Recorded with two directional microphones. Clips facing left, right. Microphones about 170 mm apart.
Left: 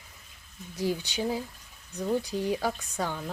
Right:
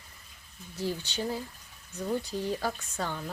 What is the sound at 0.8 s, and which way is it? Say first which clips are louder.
Speech: left 3 dB; 15° left (ahead or behind).